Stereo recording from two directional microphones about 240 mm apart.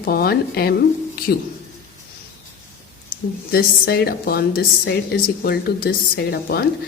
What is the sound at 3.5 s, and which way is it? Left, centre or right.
Speech, left.